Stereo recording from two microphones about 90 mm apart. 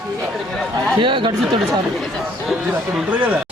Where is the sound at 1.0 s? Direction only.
70° right (ahead or behind).